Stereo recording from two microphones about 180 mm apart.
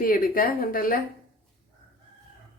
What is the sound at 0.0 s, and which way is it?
Speech, 50° left (ahead or behind).